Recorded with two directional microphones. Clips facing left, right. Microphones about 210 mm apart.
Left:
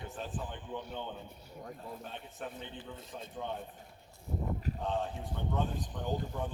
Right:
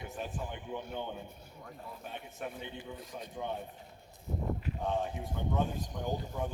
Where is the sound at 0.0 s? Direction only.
10° right (ahead or behind).